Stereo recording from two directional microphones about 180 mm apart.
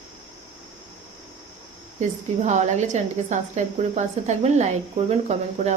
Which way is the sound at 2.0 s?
40° right (ahead or behind).